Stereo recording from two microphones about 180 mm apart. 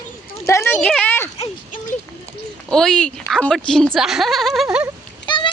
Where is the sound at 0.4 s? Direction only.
15° left (ahead or behind).